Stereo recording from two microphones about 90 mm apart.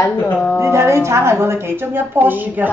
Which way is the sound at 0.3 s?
20° left (ahead or behind).